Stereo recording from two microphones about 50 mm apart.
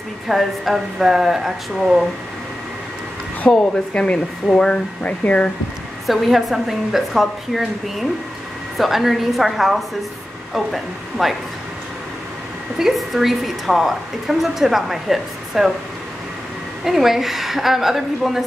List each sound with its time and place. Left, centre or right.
0.3 s a woman's voice: centre
3.5 s speech: centre
5.0 s speech: left
6.0 s a woman's voice: centre
12.7 s a woman's voice: centre
16.8 s a woman's voice: centre